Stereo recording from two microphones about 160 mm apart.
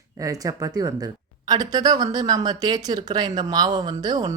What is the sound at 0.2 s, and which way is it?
Speech, 20° right (ahead or behind).